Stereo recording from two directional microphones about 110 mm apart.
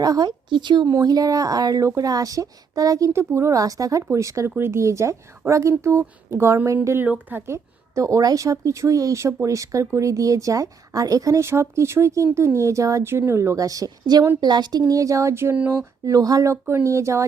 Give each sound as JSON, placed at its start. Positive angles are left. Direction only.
{"t": 0.0, "sound": "speech", "side_deg": -35}
{"t": 16.0, "sound": "speech", "side_deg": -30}